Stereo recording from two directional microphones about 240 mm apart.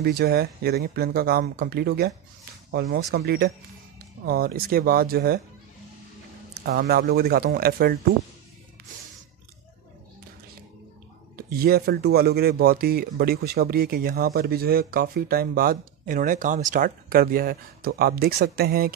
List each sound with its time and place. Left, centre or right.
0.0 s speech: right
6.5 s speech: right
11.3 s speech: right